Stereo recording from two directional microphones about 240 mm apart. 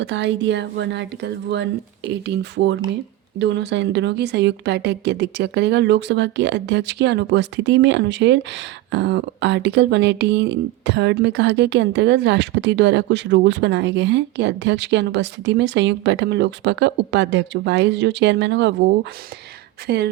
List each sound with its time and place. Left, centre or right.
0.0 s a woman's voice: right
19.9 s a woman's voice: right